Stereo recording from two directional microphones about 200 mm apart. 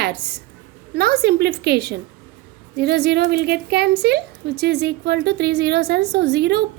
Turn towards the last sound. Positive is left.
turn(degrees=-55)  # may be behind; listen again after turning